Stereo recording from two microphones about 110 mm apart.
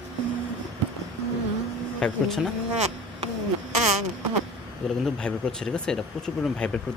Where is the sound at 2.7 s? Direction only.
80° right.